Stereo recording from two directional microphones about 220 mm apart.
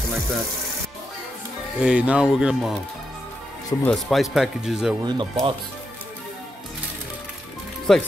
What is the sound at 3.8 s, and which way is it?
Speech, centre (ahead or behind).